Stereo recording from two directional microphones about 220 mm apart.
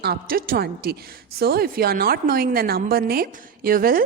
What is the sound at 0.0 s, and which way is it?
A woman's voice, 45° right (ahead or behind).